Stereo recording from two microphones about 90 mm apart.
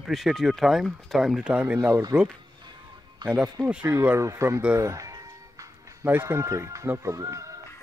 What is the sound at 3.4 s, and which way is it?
Speech, 40° right (ahead or behind).